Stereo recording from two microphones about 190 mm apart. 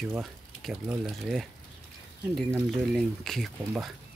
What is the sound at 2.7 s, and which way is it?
Speech, centre (ahead or behind).